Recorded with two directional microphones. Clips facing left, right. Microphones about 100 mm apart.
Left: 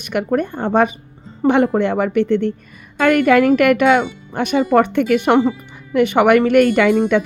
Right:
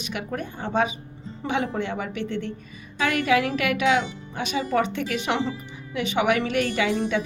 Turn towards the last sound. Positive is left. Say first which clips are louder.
# left 11 dB
turn(degrees=55)  # may be behind; listen again after turning